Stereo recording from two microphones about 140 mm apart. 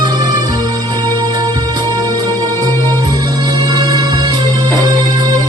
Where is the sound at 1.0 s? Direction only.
25° right (ahead or behind).